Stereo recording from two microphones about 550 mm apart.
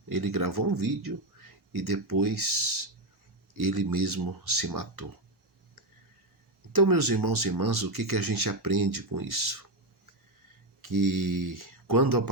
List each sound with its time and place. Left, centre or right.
0.1 s speech: right
6.7 s speech: right
10.8 s speech: right